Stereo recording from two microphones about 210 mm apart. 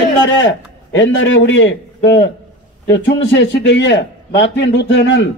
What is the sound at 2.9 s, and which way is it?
A man's voice, 60° left (ahead or behind).